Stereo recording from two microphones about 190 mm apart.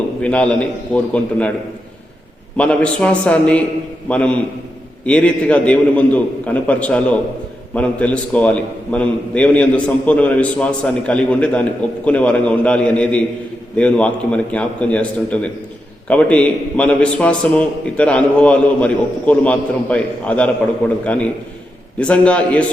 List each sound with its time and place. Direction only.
0.2 s a man's voice: 5° left (ahead or behind)
2.6 s a man's voice: 5° left (ahead or behind)